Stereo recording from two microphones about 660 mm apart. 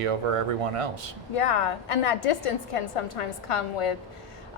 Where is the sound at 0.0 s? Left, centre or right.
Right.